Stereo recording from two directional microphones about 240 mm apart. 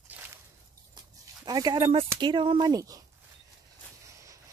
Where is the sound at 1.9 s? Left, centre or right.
Right.